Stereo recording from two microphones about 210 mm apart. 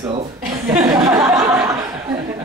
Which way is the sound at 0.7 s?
15° right (ahead or behind).